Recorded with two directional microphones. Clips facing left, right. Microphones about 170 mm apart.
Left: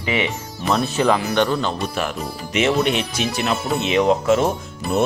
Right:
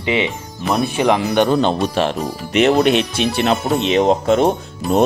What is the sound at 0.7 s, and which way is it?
Speech, 15° right (ahead or behind).